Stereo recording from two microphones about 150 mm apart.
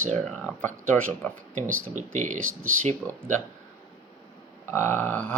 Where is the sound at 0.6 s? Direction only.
10° left (ahead or behind).